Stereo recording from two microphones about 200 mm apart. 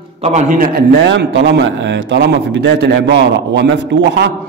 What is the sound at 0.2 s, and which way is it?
A man's voice, 35° right (ahead or behind).